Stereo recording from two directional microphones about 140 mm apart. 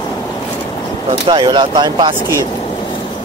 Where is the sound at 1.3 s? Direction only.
35° right (ahead or behind).